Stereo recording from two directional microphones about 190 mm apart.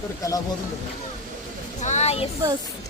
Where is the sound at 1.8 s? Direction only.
35° left (ahead or behind).